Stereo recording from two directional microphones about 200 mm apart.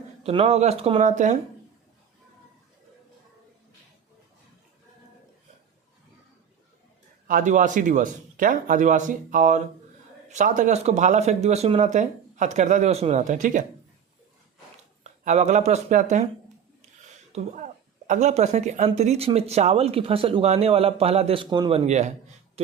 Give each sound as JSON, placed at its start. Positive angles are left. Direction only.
{"t": 0.2, "sound": "a woman's voice", "side_deg": -30}
{"t": 7.3, "sound": "a woman's voice", "side_deg": -40}
{"t": 15.0, "sound": "a woman's voice", "side_deg": -35}
{"t": 21.8, "sound": "a woman's voice", "side_deg": -35}